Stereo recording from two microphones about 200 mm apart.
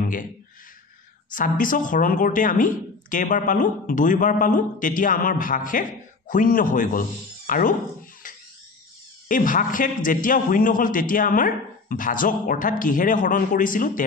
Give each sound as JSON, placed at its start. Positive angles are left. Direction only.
{"t": 1.3, "sound": "a woman's voice", "side_deg": 40}
{"t": 9.3, "sound": "a man's voice", "side_deg": 40}